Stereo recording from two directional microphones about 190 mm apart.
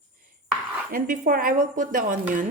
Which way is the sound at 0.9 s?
45° right (ahead or behind).